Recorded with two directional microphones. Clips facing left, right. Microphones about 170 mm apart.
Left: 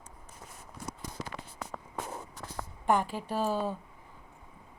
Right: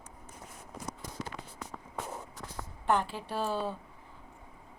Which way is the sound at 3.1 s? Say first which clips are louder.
Left 2 dB; 5° left (ahead or behind).